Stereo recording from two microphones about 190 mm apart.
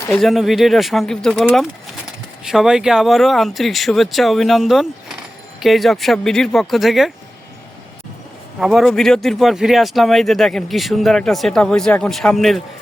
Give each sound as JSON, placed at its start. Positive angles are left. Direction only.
{"t": 0.2, "sound": "speech", "side_deg": 0}
{"t": 8.5, "sound": "speech", "side_deg": 0}